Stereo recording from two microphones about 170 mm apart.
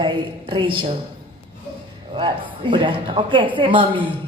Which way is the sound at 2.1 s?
30° right (ahead or behind).